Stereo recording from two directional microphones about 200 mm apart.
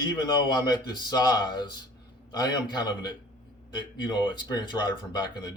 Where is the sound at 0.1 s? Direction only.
20° left (ahead or behind).